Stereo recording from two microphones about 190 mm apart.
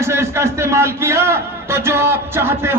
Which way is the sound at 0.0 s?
15° right (ahead or behind).